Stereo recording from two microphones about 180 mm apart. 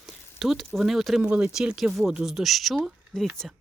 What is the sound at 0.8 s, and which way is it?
Speech, centre (ahead or behind).